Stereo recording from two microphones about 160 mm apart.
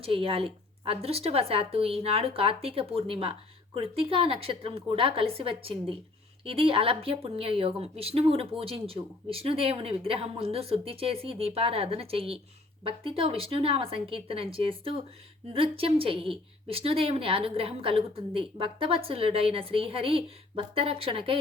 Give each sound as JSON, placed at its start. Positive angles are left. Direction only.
{"t": 0.0, "sound": "a woman's voice", "side_deg": -35}